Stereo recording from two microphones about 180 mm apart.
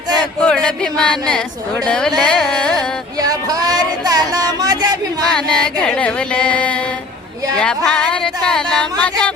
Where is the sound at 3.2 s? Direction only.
20° right (ahead or behind).